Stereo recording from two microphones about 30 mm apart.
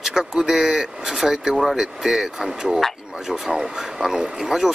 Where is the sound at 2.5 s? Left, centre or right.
Right.